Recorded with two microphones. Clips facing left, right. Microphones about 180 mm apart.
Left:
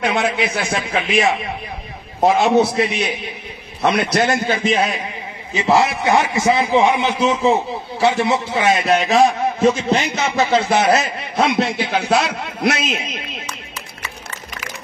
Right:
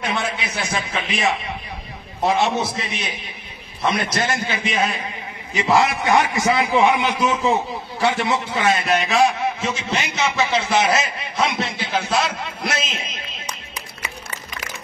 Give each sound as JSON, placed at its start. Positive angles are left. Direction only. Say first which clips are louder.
{"t": 0.0, "sound": "a man's voice", "louder": "left 6 dB", "side_deg": 50}
{"t": 2.1, "sound": "a man's voice", "louder": "left 6 dB", "side_deg": 50}
{"t": 4.6, "sound": "a man's voice", "louder": "left 3 dB", "side_deg": 35}
{"t": 5.5, "sound": "a man's voice", "louder": "left 2 dB", "side_deg": 20}